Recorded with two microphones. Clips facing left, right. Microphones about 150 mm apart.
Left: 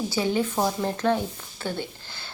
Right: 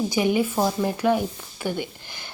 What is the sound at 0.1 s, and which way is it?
Speech, 15° right (ahead or behind).